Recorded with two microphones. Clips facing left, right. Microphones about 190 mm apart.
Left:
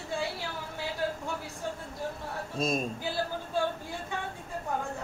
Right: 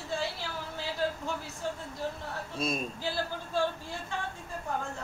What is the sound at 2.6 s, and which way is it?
Speech, 45° left (ahead or behind).